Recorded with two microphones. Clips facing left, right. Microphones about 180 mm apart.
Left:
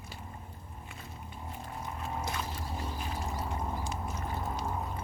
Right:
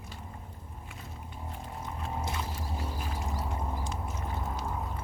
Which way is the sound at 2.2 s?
25° right (ahead or behind).